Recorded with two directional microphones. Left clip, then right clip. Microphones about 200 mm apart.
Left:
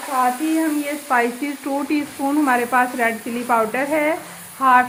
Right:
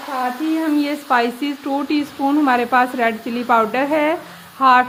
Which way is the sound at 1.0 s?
35° right (ahead or behind).